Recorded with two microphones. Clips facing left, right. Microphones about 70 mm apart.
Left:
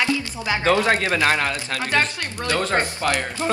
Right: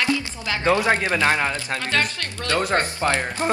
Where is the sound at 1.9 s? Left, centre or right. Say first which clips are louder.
Left 3 dB; centre.